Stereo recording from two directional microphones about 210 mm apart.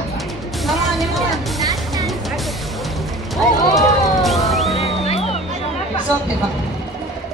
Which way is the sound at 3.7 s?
Centre (ahead or behind).